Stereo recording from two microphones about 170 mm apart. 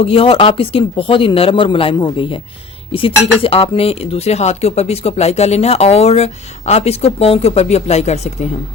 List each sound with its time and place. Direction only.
0.0 s speech: 35° left (ahead or behind)